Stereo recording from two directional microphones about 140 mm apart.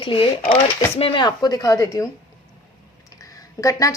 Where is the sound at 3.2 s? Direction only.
25° left (ahead or behind).